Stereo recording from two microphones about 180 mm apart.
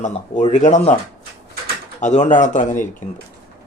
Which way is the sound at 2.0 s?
40° left (ahead or behind).